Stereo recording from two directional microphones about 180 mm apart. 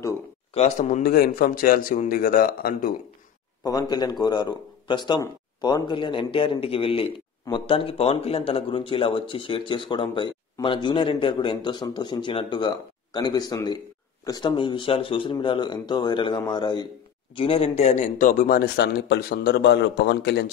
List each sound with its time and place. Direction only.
0.6 s speech: 40° left (ahead or behind)
1.1 s a man's voice: 55° left (ahead or behind)
3.6 s a man's voice: 20° left (ahead or behind); by 18.6 s 45° left (ahead or behind)
18.8 s a man's voice: 65° left (ahead or behind)